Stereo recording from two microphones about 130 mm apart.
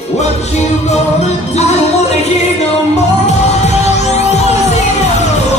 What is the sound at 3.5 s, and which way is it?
Music, 60° left (ahead or behind).